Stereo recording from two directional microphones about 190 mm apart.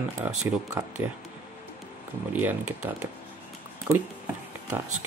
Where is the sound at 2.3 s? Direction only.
10° right (ahead or behind).